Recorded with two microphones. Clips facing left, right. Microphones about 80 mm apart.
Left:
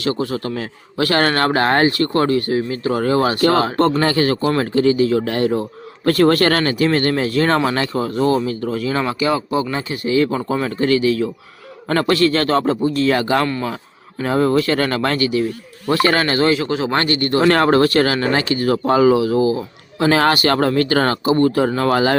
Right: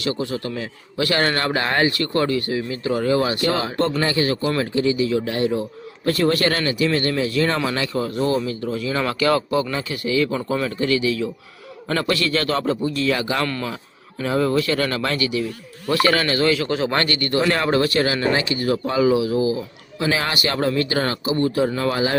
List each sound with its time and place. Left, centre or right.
0.0 s speech: left
9.0 s speech: centre
9.7 s speech: left
13.4 s speech: left
14.2 s speech: left
16.6 s speech: left
17.5 s speech: left
20.0 s a man's voice: left
20.3 s speech: left
20.6 s speech: left